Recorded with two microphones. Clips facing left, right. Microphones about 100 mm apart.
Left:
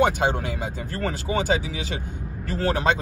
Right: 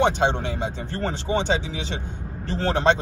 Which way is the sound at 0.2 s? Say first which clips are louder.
Right 1 dB; 25° right (ahead or behind).